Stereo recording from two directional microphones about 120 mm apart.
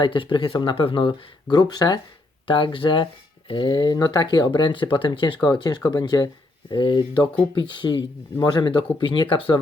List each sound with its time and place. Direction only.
0.0 s speech: 40° left (ahead or behind)
2.5 s speech: 45° left (ahead or behind)